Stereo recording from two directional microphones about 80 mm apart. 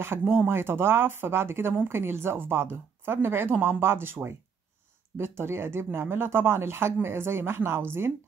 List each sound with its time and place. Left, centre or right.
0.2 s speech: right